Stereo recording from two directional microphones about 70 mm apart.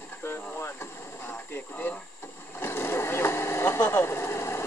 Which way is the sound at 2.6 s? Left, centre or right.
Left.